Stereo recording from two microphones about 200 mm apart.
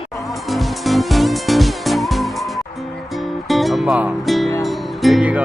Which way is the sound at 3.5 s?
Centre (ahead or behind).